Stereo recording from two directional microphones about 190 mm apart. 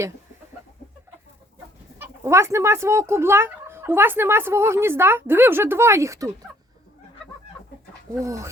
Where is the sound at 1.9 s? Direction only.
15° right (ahead or behind).